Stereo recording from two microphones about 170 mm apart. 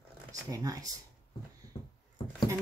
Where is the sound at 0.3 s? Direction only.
20° right (ahead or behind).